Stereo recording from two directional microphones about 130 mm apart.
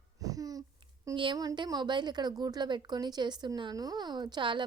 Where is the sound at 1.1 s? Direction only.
40° right (ahead or behind).